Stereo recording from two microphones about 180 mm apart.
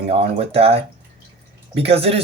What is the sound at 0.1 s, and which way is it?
Speech, 35° right (ahead or behind).